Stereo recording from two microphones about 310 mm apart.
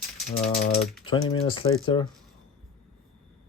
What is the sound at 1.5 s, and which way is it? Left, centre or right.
Speech, centre.